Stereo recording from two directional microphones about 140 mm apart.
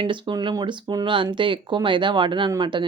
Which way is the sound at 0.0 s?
35° right (ahead or behind).